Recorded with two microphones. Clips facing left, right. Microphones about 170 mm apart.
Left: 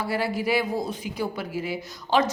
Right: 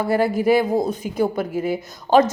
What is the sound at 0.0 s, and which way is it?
A woman's voice, 50° right (ahead or behind).